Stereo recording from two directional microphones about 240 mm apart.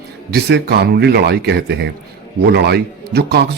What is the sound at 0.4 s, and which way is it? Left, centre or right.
Speech, right.